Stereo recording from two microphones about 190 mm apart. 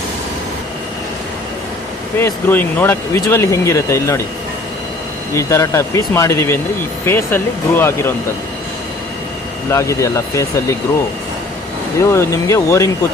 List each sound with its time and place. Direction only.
2.1 s speech: 10° left (ahead or behind)
5.3 s speech: 15° left (ahead or behind)
9.6 s speech: 15° left (ahead or behind)
11.9 s speech: 15° left (ahead or behind)